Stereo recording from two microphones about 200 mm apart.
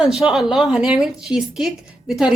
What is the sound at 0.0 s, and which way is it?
A woman's voice, 5° right (ahead or behind).